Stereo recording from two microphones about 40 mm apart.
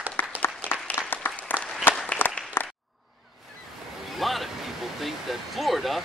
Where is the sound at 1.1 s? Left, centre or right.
Left.